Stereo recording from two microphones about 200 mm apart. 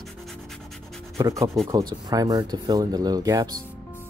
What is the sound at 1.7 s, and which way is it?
Speech, 20° right (ahead or behind).